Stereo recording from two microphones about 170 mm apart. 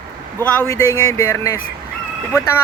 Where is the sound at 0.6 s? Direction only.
15° left (ahead or behind).